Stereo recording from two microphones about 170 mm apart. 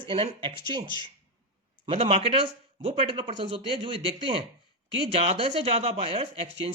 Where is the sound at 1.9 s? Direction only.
35° right (ahead or behind).